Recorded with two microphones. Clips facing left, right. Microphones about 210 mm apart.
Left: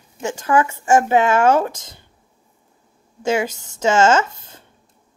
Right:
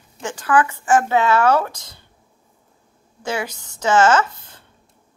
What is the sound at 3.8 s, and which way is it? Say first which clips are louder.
Speech: left 1 dB; 25° left (ahead or behind).